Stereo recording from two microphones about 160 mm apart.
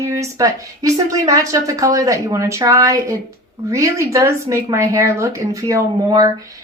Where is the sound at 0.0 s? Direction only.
20° right (ahead or behind).